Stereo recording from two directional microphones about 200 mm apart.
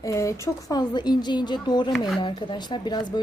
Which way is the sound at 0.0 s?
15° left (ahead or behind).